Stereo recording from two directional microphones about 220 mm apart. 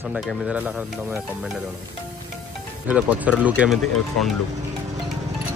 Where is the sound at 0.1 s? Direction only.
5° right (ahead or behind).